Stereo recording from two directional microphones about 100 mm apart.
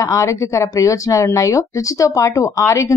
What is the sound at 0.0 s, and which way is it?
Speech, 35° left (ahead or behind).